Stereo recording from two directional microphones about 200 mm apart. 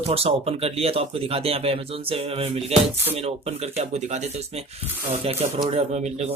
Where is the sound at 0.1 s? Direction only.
30° right (ahead or behind).